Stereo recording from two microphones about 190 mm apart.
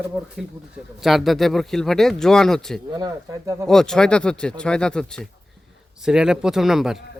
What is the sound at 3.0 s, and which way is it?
Speech, 20° right (ahead or behind).